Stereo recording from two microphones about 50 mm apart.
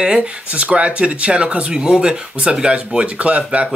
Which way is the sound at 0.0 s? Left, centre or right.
Centre.